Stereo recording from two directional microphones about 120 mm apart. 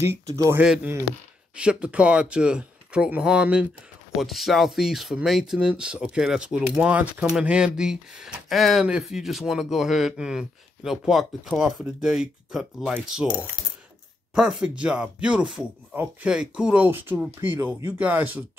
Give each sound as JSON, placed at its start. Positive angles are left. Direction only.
{"t": 0.0, "sound": "speech", "side_deg": -20}
{"t": 1.6, "sound": "speech", "side_deg": -10}
{"t": 14.3, "sound": "speech", "side_deg": -5}